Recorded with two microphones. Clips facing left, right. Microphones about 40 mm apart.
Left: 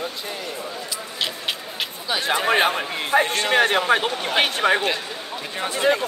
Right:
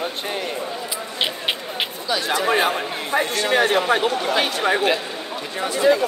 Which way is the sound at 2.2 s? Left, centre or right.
Left.